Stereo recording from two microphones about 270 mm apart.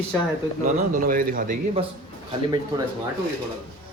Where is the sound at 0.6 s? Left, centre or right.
Right.